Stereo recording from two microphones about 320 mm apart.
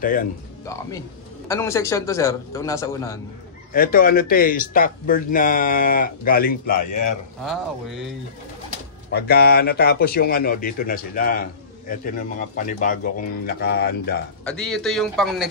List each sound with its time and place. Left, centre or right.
0.0 s speech: left
0.7 s a man's voice: centre
3.7 s speech: left
9.1 s speech: left
14.4 s speech: centre